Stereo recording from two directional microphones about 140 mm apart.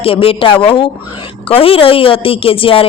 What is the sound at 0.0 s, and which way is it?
A woman's voice, 40° left (ahead or behind).